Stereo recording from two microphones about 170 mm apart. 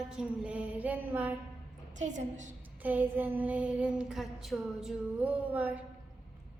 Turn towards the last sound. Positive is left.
turn(degrees=-10)  # may be behind; listen again after turning